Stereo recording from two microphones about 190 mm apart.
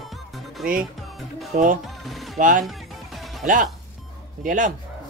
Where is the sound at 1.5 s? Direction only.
45° right (ahead or behind).